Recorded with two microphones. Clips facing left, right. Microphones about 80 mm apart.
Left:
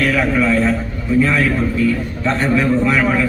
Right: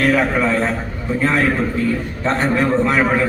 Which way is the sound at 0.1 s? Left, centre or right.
Right.